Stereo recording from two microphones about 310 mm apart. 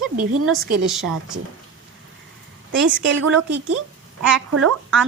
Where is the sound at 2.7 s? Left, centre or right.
Right.